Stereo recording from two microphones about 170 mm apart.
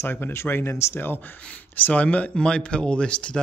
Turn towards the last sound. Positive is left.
turn(degrees=5)  # may be behind; listen again after turning